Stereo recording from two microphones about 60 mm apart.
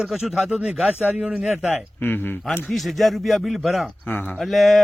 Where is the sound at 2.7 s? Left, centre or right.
Centre.